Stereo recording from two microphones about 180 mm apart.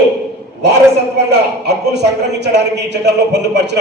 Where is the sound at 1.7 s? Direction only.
70° right (ahead or behind).